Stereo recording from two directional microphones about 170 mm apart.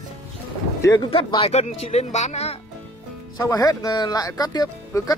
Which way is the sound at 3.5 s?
20° left (ahead or behind).